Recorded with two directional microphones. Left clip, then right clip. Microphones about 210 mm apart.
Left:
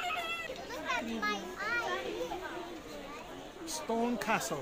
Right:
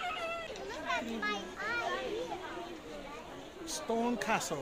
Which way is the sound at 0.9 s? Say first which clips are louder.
Left 1 dB; 25° left (ahead or behind).